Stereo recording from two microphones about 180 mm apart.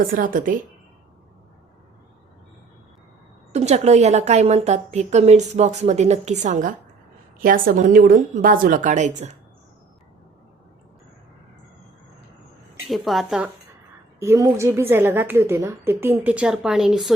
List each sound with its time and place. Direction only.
0.0 s a woman's voice: 50° right (ahead or behind)
3.5 s a woman's voice: 35° right (ahead or behind)
12.9 s a woman's voice: centre (ahead or behind)
14.2 s a woman's voice: 15° right (ahead or behind)